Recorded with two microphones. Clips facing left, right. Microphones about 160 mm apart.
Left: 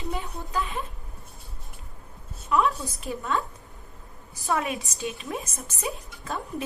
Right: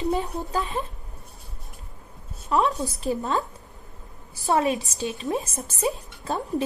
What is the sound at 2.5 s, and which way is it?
Speech, 35° right (ahead or behind).